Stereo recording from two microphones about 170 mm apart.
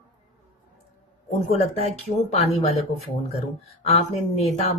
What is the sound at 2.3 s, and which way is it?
Speech, 40° left (ahead or behind).